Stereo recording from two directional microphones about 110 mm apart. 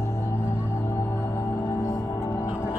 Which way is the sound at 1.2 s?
25° left (ahead or behind).